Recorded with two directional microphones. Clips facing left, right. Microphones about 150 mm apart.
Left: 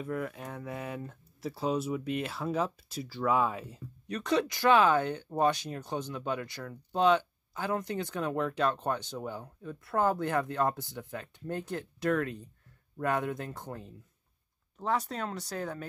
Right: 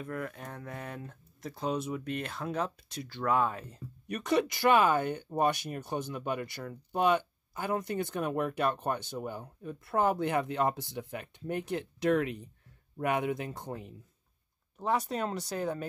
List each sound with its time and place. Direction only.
0.0 s speech: 5° left (ahead or behind)
4.1 s speech: 10° right (ahead or behind)